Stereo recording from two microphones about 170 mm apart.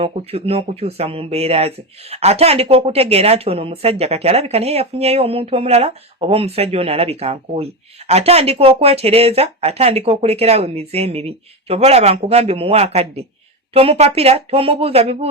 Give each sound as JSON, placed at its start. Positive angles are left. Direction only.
{"t": 0.0, "sound": "speech", "side_deg": -35}